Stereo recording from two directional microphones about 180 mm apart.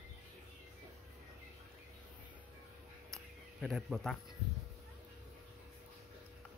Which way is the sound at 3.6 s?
Centre (ahead or behind).